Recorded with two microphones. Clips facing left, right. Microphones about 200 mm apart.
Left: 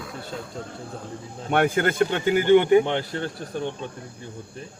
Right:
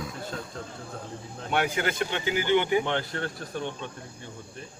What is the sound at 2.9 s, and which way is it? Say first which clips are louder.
Speech: left 3 dB; 20° left (ahead or behind).